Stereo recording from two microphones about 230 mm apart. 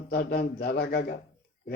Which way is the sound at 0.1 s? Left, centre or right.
Left.